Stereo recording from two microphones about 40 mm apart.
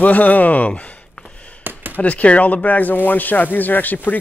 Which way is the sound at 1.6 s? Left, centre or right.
Right.